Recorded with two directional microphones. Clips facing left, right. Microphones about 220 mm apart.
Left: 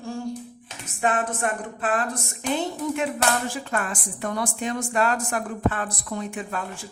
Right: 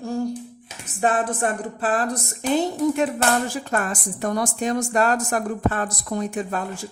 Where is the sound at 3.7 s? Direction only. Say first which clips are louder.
Right 3 dB; 40° right (ahead or behind).